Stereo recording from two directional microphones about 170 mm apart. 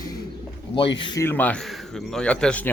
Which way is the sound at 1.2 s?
10° left (ahead or behind).